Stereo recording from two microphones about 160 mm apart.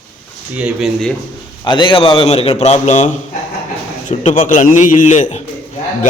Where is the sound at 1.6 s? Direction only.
30° left (ahead or behind); by 3.1 s 50° left (ahead or behind).